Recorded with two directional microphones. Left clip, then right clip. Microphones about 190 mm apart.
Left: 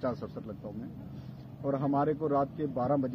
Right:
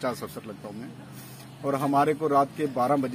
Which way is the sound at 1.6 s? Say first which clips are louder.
Right 6 dB; 20° right (ahead or behind).